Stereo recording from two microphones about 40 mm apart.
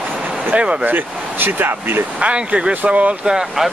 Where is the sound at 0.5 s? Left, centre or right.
Right.